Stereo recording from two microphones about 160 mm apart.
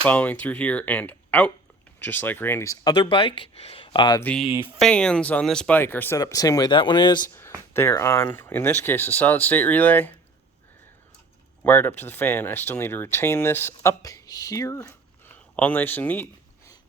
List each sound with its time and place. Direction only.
0.0 s speech: 10° left (ahead or behind); by 4.2 s 30° left (ahead or behind)
4.2 s speech: 10° left (ahead or behind); by 7.2 s 30° left (ahead or behind)
7.7 s speech: 15° left (ahead or behind)
11.6 s speech: 10° left (ahead or behind)